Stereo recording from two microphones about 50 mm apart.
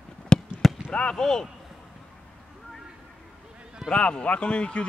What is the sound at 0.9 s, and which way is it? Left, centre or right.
Speech, centre.